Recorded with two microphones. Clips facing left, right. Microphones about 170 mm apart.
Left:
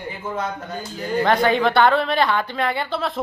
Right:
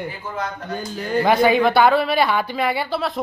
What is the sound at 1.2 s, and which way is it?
A woman's voice, 10° right (ahead or behind).